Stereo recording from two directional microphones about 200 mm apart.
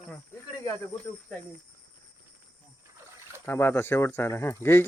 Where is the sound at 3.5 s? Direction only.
10° left (ahead or behind).